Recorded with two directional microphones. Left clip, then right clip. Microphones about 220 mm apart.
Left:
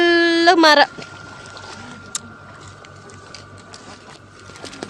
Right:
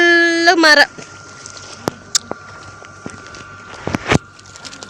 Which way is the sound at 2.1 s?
10° right (ahead or behind).